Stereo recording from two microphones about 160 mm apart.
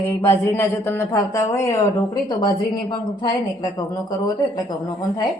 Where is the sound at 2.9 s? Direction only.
25° left (ahead or behind).